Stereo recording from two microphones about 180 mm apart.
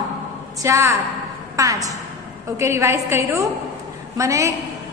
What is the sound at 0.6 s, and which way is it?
A woman's voice, 15° right (ahead or behind).